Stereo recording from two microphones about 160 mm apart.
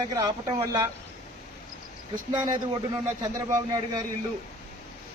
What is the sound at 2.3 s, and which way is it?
Speech, 30° right (ahead or behind).